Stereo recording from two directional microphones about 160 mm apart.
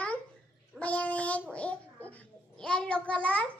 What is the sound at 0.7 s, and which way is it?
Child singing, 10° left (ahead or behind).